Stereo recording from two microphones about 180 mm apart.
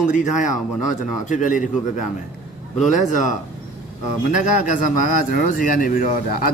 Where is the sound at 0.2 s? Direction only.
45° left (ahead or behind).